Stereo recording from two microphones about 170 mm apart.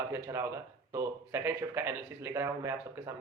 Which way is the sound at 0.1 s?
15° right (ahead or behind).